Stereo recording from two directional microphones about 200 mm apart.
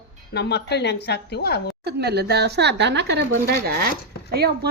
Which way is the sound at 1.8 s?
55° right (ahead or behind).